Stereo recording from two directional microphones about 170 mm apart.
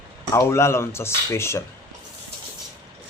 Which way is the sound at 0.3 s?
15° left (ahead or behind).